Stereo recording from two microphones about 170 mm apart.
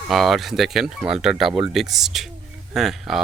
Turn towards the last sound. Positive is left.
turn(degrees=0)  # may be behind; listen again after turning